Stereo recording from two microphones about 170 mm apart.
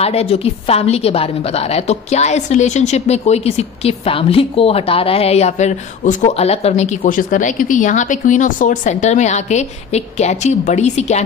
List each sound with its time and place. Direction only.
0.0 s a woman's voice: 35° left (ahead or behind)